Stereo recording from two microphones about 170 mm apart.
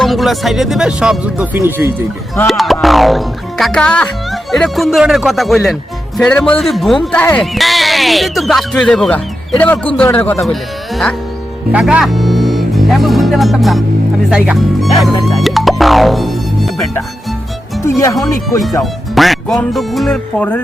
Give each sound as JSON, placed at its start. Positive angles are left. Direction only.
{"t": 0.0, "sound": "speech", "side_deg": 0}
{"t": 2.5, "sound": "speech", "side_deg": 0}
{"t": 10.4, "sound": "speech", "side_deg": 0}
{"t": 17.8, "sound": "speech", "side_deg": 20}
{"t": 18.6, "sound": "speech", "side_deg": 0}